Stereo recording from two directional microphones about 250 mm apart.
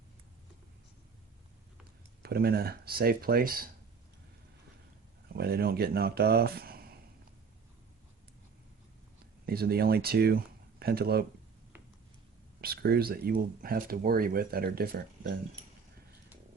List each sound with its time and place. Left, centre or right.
2.2 s speech: right
5.3 s speech: right
9.5 s speech: right
12.6 s speech: right